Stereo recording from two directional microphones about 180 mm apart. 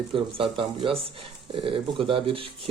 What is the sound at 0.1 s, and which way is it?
Speech, 30° right (ahead or behind).